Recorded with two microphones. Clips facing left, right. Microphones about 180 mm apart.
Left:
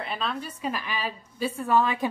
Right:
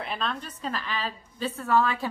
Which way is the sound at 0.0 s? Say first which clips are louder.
Left 1 dB; centre (ahead or behind).